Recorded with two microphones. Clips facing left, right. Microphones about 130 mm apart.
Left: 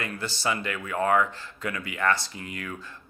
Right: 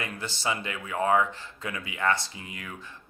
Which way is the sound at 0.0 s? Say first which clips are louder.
Left 2 dB; 20° right (ahead or behind).